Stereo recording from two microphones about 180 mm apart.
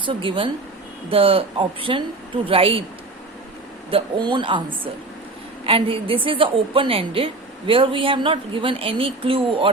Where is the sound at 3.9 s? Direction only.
25° right (ahead or behind).